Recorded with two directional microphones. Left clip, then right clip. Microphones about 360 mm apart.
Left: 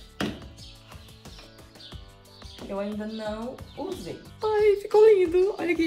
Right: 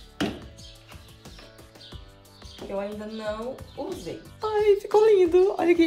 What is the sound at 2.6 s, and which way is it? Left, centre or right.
Music, centre.